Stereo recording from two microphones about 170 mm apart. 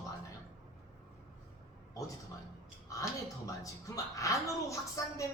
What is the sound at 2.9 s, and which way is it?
A woman's voice, 20° left (ahead or behind).